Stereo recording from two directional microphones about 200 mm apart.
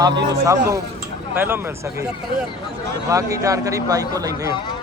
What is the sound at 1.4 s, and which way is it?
Speech, 10° right (ahead or behind).